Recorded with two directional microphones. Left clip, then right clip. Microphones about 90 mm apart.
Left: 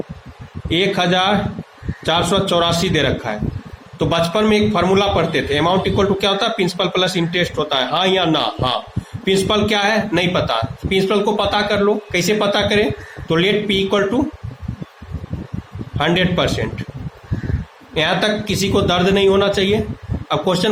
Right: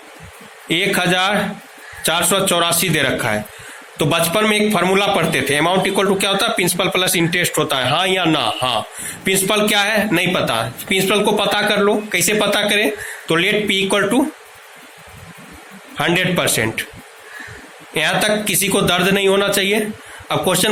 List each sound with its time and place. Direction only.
0.7 s a man's voice: 25° right (ahead or behind)
16.0 s a man's voice: 25° right (ahead or behind)
17.9 s a man's voice: 30° right (ahead or behind)